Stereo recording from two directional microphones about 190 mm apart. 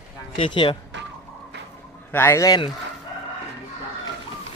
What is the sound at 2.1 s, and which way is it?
Speech, 10° left (ahead or behind).